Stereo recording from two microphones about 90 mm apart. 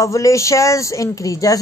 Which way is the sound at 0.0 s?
35° left (ahead or behind).